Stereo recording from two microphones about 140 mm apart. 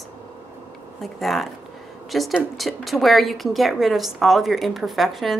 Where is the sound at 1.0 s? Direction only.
Centre (ahead or behind).